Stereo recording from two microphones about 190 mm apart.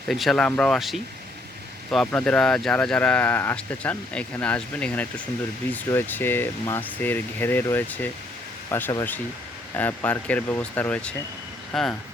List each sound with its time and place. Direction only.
0.1 s speech: centre (ahead or behind)